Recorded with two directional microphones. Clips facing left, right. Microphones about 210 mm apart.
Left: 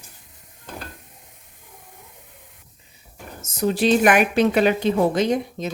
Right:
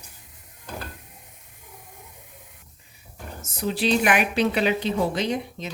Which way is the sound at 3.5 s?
45° left (ahead or behind).